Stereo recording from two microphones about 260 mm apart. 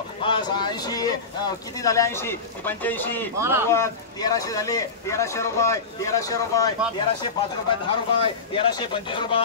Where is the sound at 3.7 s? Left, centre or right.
Centre.